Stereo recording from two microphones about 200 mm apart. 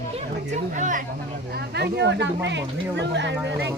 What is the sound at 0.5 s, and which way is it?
Speech, 40° right (ahead or behind).